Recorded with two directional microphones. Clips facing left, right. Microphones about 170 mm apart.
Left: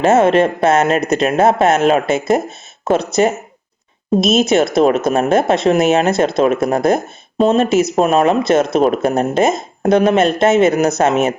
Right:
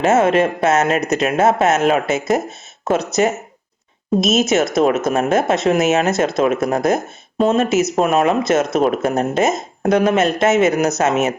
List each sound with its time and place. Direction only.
0.0 s speech: 30° left (ahead or behind)